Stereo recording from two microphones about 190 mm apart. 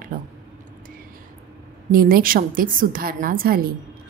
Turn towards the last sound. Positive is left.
turn(degrees=-50)  # may be behind; listen again after turning